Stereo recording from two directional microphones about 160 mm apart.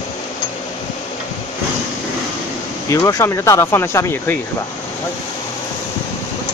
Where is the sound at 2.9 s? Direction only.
20° left (ahead or behind).